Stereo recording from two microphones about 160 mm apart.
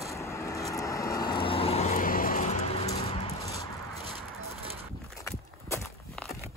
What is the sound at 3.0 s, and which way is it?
Clip-clop, 35° left (ahead or behind).